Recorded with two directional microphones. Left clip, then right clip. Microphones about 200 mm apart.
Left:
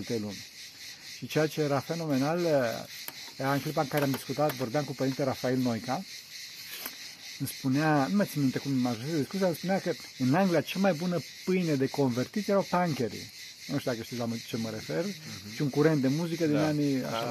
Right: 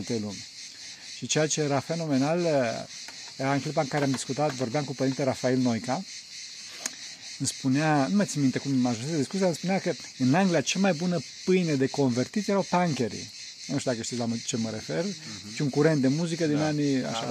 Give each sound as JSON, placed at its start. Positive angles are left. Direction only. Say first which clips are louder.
{"t": 0.1, "sound": "speech", "louder": "right 2 dB", "side_deg": -35}
{"t": 7.4, "sound": "speech", "louder": "right 2 dB", "side_deg": -35}